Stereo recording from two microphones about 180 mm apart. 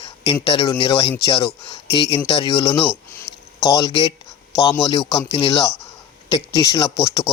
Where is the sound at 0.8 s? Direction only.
30° left (ahead or behind).